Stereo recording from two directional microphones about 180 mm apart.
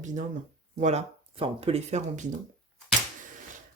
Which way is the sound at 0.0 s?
40° right (ahead or behind).